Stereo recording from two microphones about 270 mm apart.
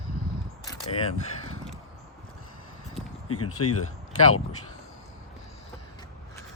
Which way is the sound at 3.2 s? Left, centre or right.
Left.